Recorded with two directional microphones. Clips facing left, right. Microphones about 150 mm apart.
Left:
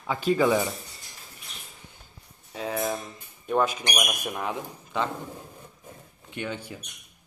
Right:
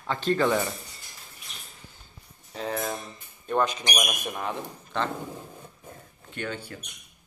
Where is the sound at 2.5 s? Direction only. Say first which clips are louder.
Left 2 dB; 5° left (ahead or behind).